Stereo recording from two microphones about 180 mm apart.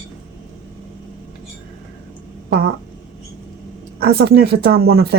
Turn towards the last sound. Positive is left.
turn(degrees=-60)  # may be behind; listen again after turning